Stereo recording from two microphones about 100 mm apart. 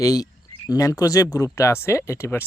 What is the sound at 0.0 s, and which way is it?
Speech, 35° left (ahead or behind).